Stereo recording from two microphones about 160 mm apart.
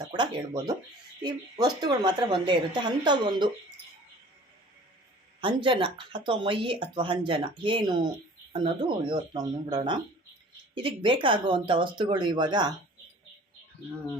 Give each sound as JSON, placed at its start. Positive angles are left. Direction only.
{"t": 0.1, "sound": "a woman's voice", "side_deg": -30}
{"t": 5.4, "sound": "a woman's voice", "side_deg": -30}